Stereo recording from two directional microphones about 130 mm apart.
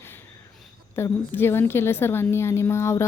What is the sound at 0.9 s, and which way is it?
A woman's voice, 20° left (ahead or behind).